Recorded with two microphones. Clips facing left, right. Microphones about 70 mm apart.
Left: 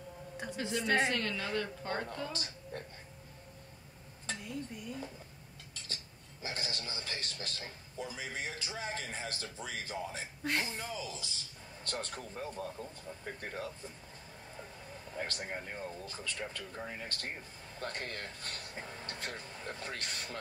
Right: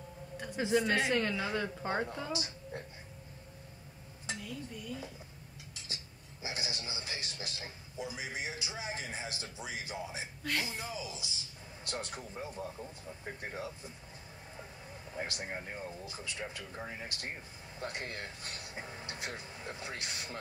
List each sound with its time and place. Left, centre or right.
0.6 s a woman's voice: centre
4.4 s speech: left
6.4 s a man's voice: centre
10.4 s speech: left
11.0 s a man's voice: centre
15.1 s a man's voice: centre